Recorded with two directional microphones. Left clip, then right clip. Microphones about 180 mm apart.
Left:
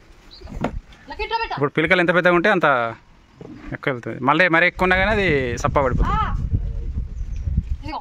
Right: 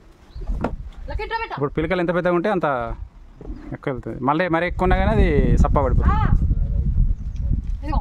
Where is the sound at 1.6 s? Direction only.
Centre (ahead or behind).